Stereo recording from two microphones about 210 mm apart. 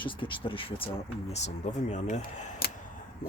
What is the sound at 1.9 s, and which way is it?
Speech, 35° left (ahead or behind).